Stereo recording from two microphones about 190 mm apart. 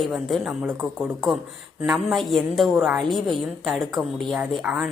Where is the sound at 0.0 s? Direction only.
Centre (ahead or behind).